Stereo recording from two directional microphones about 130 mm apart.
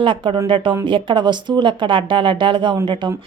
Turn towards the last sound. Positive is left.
turn(degrees=-35)  # may be behind; listen again after turning